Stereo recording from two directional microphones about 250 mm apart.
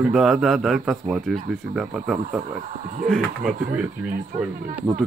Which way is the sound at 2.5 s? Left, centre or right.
Right.